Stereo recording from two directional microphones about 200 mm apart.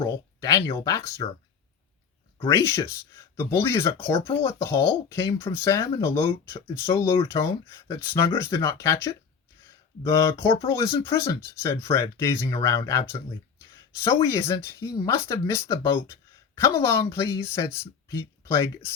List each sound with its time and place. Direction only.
0.0 s speech: 15° left (ahead or behind)
2.5 s speech: 15° left (ahead or behind)